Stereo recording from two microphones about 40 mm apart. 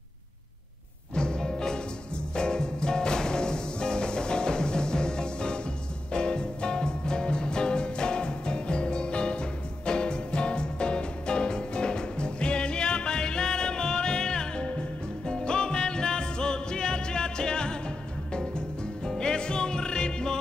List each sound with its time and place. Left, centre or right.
1.1 s music: left